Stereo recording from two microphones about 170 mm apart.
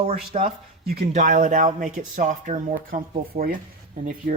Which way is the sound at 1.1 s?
50° right (ahead or behind).